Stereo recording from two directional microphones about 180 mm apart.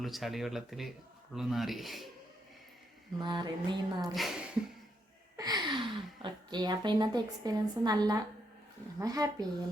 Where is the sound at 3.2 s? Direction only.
25° right (ahead or behind).